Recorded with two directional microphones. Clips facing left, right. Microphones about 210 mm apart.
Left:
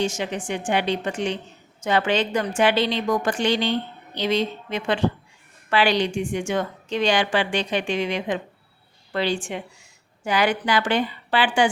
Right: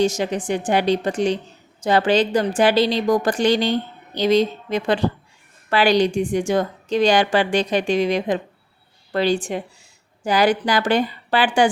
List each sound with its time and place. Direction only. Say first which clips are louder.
0.0 s a woman's voice: right 5 dB; 40° right (ahead or behind)